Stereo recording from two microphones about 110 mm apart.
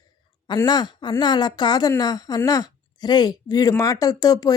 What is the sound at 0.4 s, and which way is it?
A woman's voice, 40° left (ahead or behind).